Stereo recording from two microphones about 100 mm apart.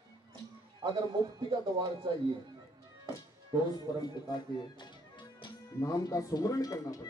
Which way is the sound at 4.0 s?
45° left (ahead or behind).